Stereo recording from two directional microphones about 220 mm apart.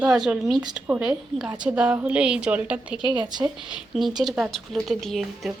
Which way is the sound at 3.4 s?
5° right (ahead or behind).